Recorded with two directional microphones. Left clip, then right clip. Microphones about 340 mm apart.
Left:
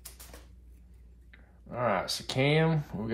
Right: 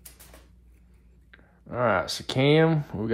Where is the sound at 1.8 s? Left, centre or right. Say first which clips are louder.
Right 5 dB; right.